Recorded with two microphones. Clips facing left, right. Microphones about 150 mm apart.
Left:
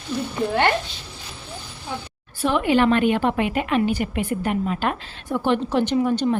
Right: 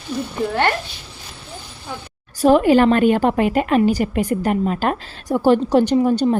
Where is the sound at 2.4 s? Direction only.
40° right (ahead or behind).